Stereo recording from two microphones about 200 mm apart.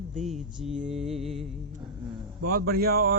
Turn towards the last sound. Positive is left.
turn(degrees=-50)  # may be behind; listen again after turning